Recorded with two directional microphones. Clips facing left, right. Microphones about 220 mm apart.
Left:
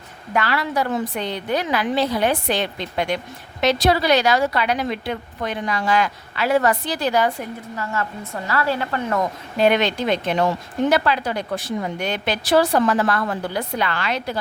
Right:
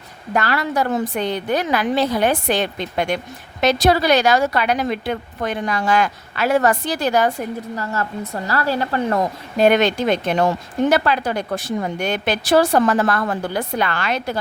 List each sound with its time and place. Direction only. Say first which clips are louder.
0.3 s a woman's voice: right 2 dB; 45° right (ahead or behind)
9.6 s speech: right 3 dB; 45° right (ahead or behind)